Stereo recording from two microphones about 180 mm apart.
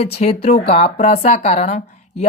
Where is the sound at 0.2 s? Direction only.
40° left (ahead or behind).